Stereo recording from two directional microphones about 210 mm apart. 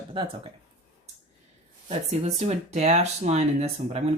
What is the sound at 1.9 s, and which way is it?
Speech, 30° right (ahead or behind).